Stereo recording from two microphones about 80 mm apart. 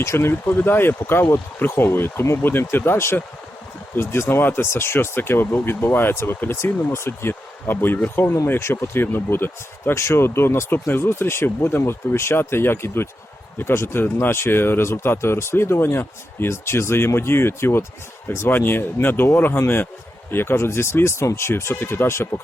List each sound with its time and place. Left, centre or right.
0.0 s speech: left